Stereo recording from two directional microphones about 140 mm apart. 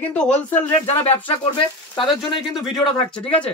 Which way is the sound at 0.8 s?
45° left (ahead or behind).